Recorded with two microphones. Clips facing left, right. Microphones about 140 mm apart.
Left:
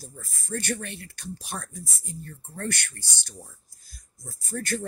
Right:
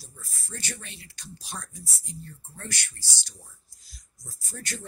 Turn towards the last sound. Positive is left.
turn(degrees=55)  # may be behind; listen again after turning